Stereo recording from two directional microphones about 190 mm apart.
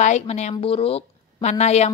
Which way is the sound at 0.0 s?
40° left (ahead or behind).